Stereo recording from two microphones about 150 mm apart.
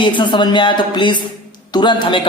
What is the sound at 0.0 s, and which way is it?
A woman's voice, 30° left (ahead or behind).